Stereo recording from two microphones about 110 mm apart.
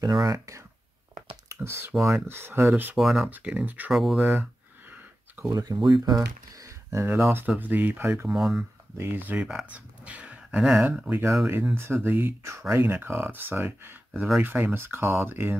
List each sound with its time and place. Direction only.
0.0 s speech: 40° right (ahead or behind)
1.5 s speech: 25° right (ahead or behind)
2.0 s speech: 5° right (ahead or behind)
2.2 s speech: 20° right (ahead or behind)
3.0 s speech: centre (ahead or behind)
3.3 s speech: 15° right (ahead or behind)
3.9 s speech: centre (ahead or behind)
4.2 s speech: 15° right (ahead or behind)
5.5 s speech: 35° right (ahead or behind); by 8.3 s 20° right (ahead or behind)
8.3 s speech: 5° right (ahead or behind)
8.9 s speech: 20° right (ahead or behind)
9.7 s dog: 10° right (ahead or behind)
10.9 s speech: 15° right (ahead or behind)